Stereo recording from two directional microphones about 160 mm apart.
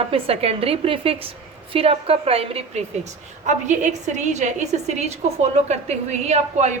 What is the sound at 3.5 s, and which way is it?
A woman's voice, 50° right (ahead or behind).